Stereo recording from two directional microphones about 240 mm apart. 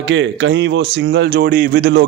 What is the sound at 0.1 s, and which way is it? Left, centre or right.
Speech, right.